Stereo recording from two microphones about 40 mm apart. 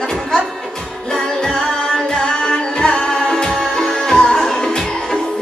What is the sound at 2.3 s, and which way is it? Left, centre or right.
Music, left.